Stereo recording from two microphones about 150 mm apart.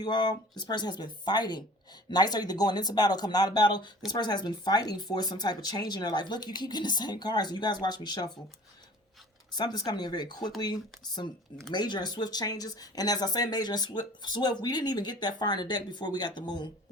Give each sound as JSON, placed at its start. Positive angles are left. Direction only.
{"t": 0.0, "sound": "speech", "side_deg": 30}
{"t": 9.5, "sound": "speech", "side_deg": 30}